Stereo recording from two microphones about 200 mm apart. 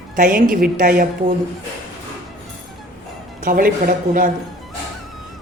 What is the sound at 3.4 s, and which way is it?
Speech, 45° right (ahead or behind).